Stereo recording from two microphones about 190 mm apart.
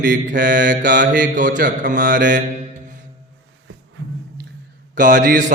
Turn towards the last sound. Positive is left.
turn(degrees=-45)  # may be behind; listen again after turning